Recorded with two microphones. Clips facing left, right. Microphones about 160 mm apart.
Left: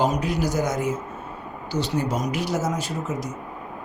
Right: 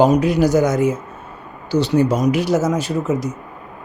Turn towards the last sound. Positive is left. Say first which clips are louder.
# right 8 dB
turn(degrees=-75)  # may be behind; listen again after turning